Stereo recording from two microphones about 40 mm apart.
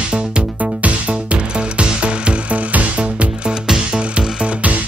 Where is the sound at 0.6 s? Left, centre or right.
Right.